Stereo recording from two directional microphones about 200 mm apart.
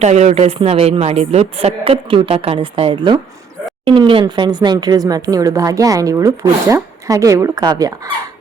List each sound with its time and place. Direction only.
0.0 s speech: 35° right (ahead or behind); by 8.1 s 20° right (ahead or behind)